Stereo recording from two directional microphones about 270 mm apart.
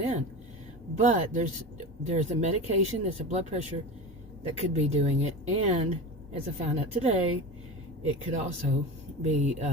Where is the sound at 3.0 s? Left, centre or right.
Right.